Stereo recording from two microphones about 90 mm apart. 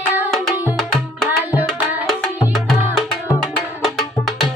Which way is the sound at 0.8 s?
5° left (ahead or behind).